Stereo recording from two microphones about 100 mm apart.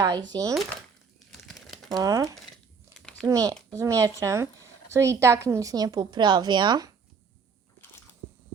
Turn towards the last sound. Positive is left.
turn(degrees=-45)  # may be behind; listen again after turning